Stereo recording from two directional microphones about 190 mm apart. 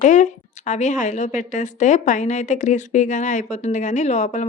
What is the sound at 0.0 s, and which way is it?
A woman's voice, 40° left (ahead or behind).